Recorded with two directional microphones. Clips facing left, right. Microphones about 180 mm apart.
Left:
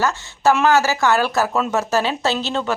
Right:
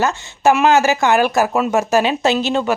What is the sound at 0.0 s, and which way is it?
Speech, 15° right (ahead or behind).